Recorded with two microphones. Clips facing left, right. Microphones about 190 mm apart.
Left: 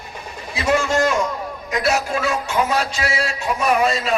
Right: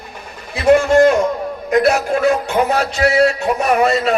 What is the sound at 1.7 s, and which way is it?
Music, 55° right (ahead or behind).